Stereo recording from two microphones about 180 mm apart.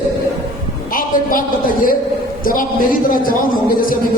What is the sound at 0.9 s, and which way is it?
A man's voice, 50° left (ahead or behind).